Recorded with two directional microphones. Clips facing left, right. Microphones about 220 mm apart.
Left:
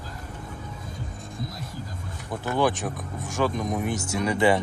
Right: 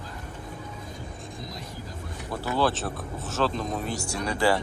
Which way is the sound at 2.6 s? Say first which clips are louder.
Left 2 dB; 15° left (ahead or behind).